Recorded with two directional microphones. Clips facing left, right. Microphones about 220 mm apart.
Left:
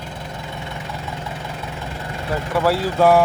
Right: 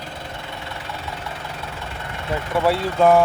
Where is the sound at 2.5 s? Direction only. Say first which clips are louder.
Left 1 dB; centre (ahead or behind).